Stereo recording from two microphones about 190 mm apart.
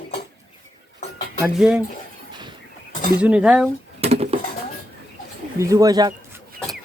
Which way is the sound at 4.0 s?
35° right (ahead or behind).